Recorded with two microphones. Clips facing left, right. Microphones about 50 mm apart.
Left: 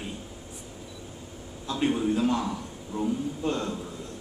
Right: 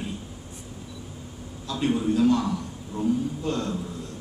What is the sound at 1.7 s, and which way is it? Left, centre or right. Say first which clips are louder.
Speech: right 1 dB; centre.